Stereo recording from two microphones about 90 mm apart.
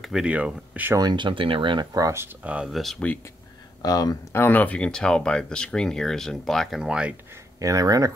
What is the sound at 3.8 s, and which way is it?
Speech, 45° left (ahead or behind).